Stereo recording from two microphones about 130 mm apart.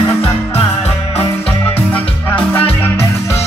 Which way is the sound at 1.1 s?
15° left (ahead or behind).